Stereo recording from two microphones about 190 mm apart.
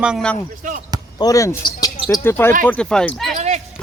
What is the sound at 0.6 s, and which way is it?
Basketball bounce, 45° right (ahead or behind).